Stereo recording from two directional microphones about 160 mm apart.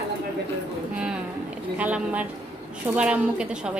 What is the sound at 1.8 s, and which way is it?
A woman's voice, 10° right (ahead or behind).